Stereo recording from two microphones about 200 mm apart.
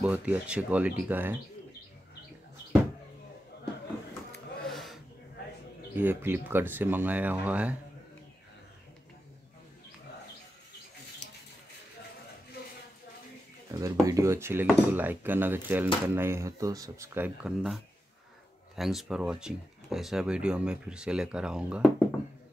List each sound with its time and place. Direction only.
0.0 s speech: 5° right (ahead or behind)
4.6 s a sound: centre (ahead or behind)
5.9 s speech: 10° right (ahead or behind)
13.7 s speech: 15° right (ahead or behind)